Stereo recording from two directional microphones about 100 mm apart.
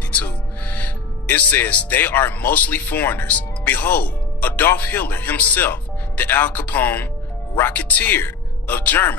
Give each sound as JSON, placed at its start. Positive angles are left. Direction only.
{"t": 0.1, "sound": "speech", "side_deg": 15}